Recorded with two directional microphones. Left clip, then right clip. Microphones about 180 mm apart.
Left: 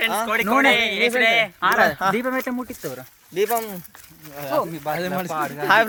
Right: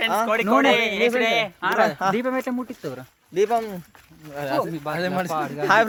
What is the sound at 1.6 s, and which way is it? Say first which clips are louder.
Speech: left 3 dB; 35° left (ahead or behind).